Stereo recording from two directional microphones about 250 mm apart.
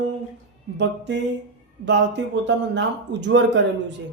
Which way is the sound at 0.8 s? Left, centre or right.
Right.